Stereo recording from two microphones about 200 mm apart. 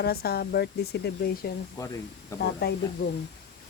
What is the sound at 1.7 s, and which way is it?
Speech, 15° left (ahead or behind).